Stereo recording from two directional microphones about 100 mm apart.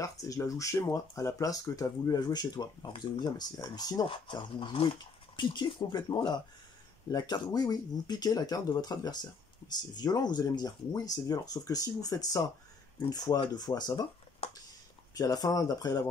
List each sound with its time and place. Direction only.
0.0 s speech: 35° left (ahead or behind)
4.0 s speech: 55° left (ahead or behind)
14.4 s a sound: 70° left (ahead or behind)
15.1 s speech: 40° left (ahead or behind)